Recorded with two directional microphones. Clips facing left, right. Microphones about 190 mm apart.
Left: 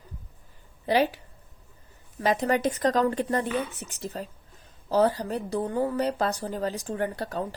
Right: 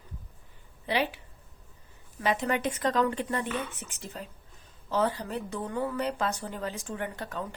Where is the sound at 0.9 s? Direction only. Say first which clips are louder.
Left 6 dB; 40° left (ahead or behind).